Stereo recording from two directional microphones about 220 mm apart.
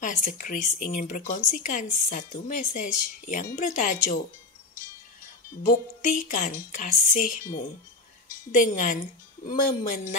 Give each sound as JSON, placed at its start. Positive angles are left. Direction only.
{"t": 0.0, "sound": "speech", "side_deg": 40}
{"t": 5.6, "sound": "speech", "side_deg": 40}
{"t": 8.5, "sound": "speech", "side_deg": 35}